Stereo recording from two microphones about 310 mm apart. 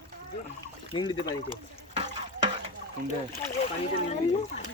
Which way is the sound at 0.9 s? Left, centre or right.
Centre.